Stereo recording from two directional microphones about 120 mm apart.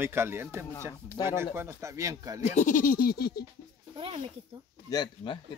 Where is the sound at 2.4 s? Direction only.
75° left (ahead or behind).